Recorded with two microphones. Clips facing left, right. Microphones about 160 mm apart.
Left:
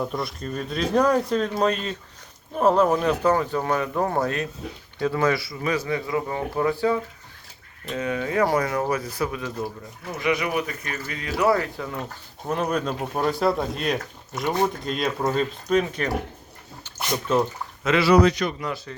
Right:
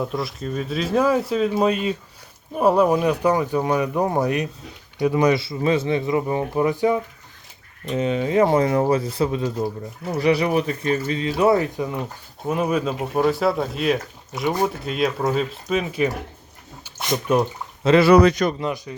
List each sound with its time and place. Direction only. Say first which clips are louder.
0.0 s speech: right 2 dB; centre (ahead or behind); by 12.0 s 20° right (ahead or behind)
12.5 s speech: right 3 dB; 5° right (ahead or behind)
16.8 s dog: right 3 dB; 15° right (ahead or behind)
18.0 s a man's voice: right 2 dB; 55° right (ahead or behind)
18.6 s speech: right 4 dB; 15° right (ahead or behind)